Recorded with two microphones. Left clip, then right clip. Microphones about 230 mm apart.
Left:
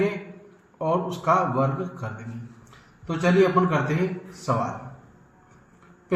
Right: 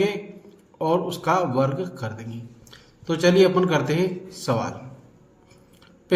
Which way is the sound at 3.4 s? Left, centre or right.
Right.